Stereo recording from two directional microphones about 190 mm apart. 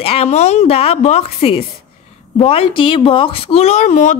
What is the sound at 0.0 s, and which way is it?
A woman's voice, 30° left (ahead or behind).